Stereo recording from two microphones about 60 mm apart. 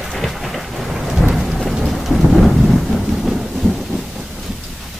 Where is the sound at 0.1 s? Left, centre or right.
Centre.